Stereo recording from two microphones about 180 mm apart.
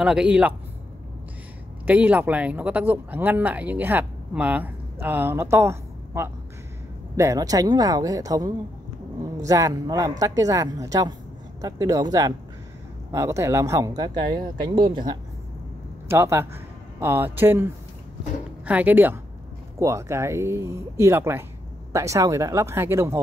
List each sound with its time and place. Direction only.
0.0 s a man's voice: 5° right (ahead or behind)
1.9 s speech: 10° right (ahead or behind); by 15.1 s 25° right (ahead or behind)
16.1 s speech: 15° right (ahead or behind)
18.7 s speech: 10° right (ahead or behind)